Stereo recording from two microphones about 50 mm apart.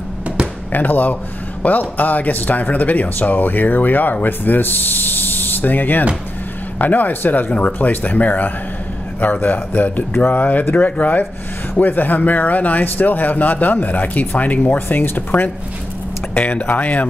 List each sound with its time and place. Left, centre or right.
0.7 s speech: left
14.9 s speech: left